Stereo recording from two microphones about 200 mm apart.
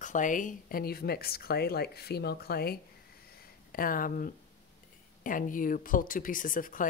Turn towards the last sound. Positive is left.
turn(degrees=40)  # may be behind; listen again after turning